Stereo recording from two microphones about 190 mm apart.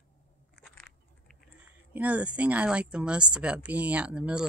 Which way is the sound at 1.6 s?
10° right (ahead or behind).